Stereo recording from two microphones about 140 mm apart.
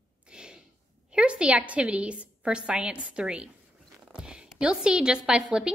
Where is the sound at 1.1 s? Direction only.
5° right (ahead or behind).